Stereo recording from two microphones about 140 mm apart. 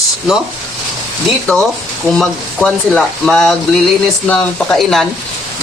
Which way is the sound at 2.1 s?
5° left (ahead or behind).